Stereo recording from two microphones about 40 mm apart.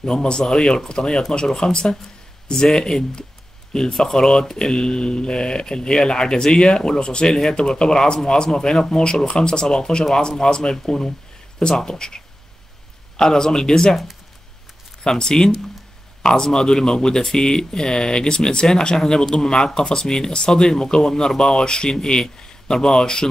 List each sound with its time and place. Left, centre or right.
0.0 s speech: left
13.2 s speech: centre
15.0 s speech: centre